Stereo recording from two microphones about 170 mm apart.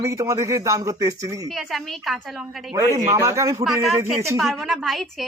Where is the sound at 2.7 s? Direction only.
15° right (ahead or behind).